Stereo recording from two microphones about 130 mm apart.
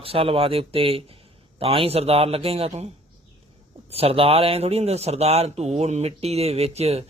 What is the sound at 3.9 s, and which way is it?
A man's voice, 50° right (ahead or behind).